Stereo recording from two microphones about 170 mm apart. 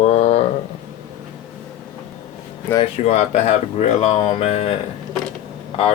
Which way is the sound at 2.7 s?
35° left (ahead or behind).